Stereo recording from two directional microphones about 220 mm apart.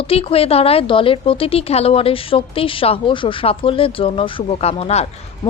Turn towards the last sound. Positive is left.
turn(degrees=25)  # may be behind; listen again after turning